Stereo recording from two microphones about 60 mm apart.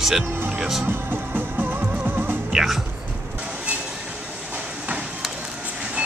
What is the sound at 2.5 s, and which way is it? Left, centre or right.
Speech, centre.